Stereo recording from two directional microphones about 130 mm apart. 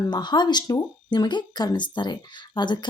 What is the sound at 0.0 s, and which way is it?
A woman's voice, 35° left (ahead or behind).